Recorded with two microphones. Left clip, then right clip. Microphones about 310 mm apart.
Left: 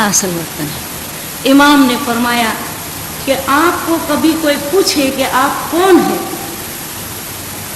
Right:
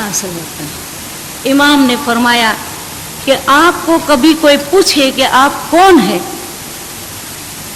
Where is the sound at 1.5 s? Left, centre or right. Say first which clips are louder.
Left 1 dB; centre.